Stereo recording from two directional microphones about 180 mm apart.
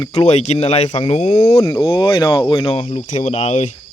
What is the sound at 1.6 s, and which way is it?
Speech, 25° left (ahead or behind).